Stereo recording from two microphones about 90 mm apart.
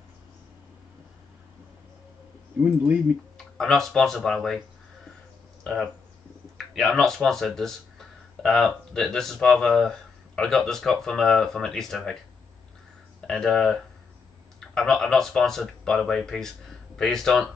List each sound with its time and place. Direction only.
2.6 s speech: 15° right (ahead or behind)
3.3 s speech: 5° left (ahead or behind)
6.6 s speech: centre (ahead or behind)
13.3 s speech: centre (ahead or behind)